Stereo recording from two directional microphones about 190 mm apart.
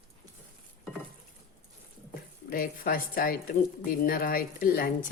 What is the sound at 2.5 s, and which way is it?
A woman's voice, 50° left (ahead or behind).